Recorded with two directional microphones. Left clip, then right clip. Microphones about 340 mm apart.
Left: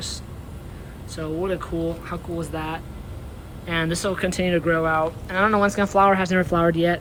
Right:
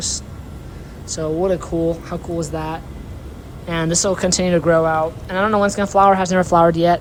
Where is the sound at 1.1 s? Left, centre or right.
Centre.